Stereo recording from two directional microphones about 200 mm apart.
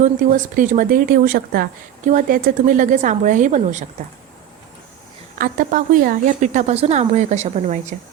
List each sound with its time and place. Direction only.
0.0 s speech: 40° right (ahead or behind)
5.4 s speech: 40° right (ahead or behind)